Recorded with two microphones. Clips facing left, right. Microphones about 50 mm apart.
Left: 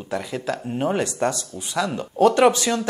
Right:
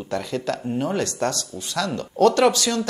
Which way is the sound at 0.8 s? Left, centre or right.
Centre.